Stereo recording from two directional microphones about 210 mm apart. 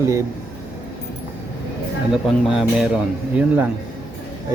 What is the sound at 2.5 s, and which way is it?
A man's voice, 5° right (ahead or behind).